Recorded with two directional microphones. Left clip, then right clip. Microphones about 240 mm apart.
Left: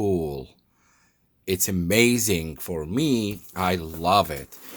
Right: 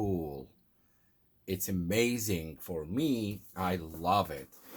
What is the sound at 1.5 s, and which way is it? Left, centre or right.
Speech, left.